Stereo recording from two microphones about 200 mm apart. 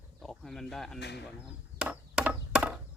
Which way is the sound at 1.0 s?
55° left (ahead or behind).